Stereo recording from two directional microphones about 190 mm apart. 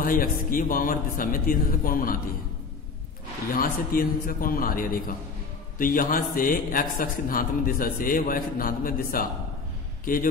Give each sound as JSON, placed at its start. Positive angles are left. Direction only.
{"t": 0.0, "sound": "a man's voice", "side_deg": 45}
{"t": 3.5, "sound": "a man's voice", "side_deg": 50}